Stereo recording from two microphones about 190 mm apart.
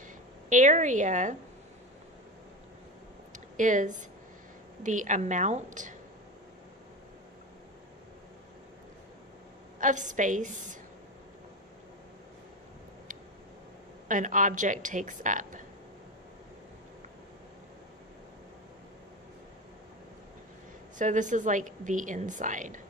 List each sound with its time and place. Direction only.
0.5 s a woman's voice: 40° right (ahead or behind)
3.3 s a sound: 40° right (ahead or behind)
4.8 s a woman's voice: 40° right (ahead or behind)
9.8 s a woman's voice: 40° right (ahead or behind)
14.1 s a woman's voice: 45° right (ahead or behind)
21.0 s a woman's voice: 40° right (ahead or behind)